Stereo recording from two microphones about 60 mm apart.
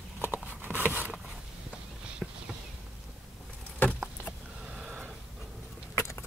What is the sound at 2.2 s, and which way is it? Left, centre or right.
Clip-clop, centre.